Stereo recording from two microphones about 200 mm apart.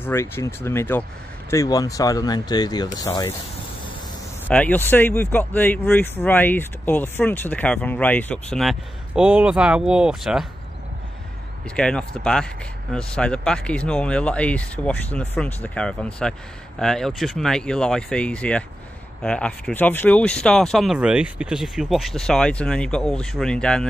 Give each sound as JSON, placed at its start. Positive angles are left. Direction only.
{"t": 0.0, "sound": "speech", "side_deg": 10}
{"t": 4.5, "sound": "speech", "side_deg": 10}
{"t": 11.7, "sound": "speech", "side_deg": 5}